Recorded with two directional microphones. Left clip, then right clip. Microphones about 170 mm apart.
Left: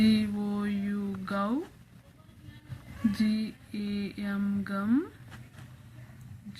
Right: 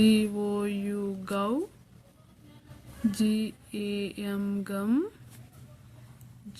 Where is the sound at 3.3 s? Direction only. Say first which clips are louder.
Right 2 dB; 90° right.